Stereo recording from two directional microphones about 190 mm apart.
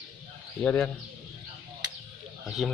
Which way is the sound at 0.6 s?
10° left (ahead or behind).